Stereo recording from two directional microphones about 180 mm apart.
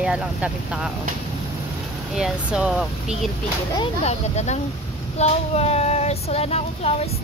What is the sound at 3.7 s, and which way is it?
Child singing, 30° left (ahead or behind).